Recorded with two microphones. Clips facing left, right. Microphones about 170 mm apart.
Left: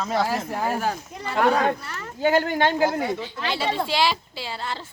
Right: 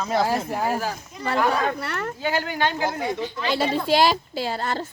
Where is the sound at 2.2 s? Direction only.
45° left (ahead or behind).